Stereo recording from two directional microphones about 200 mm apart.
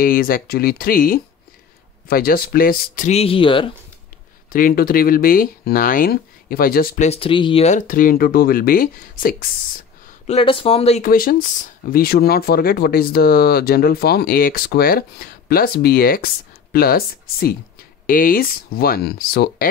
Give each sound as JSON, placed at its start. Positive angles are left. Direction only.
{"t": 0.0, "sound": "speech", "side_deg": 45}
{"t": 3.1, "sound": "speech", "side_deg": 30}
{"t": 4.5, "sound": "speech", "side_deg": 45}
{"t": 7.1, "sound": "speech", "side_deg": 25}
{"t": 10.2, "sound": "speech", "side_deg": 30}
{"t": 11.1, "sound": "speech", "side_deg": 45}